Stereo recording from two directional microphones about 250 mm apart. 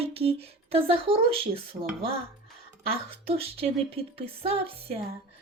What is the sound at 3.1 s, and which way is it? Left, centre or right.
Speech, right.